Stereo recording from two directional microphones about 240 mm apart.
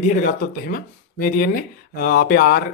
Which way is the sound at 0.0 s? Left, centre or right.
Left.